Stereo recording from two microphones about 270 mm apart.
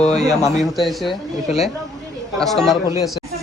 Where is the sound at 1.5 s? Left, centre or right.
Left.